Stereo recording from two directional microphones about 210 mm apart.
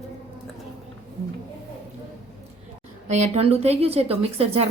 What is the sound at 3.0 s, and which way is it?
A woman's voice, 35° right (ahead or behind).